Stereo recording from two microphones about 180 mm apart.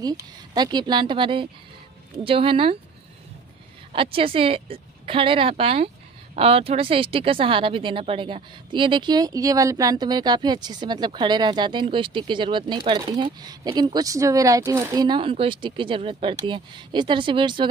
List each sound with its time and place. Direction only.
0.0 s speech: 20° right (ahead or behind)
3.9 s speech: 30° right (ahead or behind)